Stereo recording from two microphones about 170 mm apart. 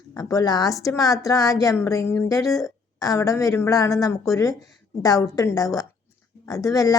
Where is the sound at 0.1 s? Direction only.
20° left (ahead or behind).